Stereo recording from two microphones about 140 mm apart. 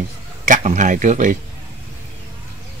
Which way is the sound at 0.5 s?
65° right (ahead or behind).